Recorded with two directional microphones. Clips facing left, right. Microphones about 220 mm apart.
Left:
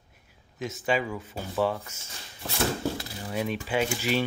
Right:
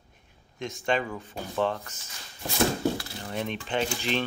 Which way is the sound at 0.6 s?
5° left (ahead or behind).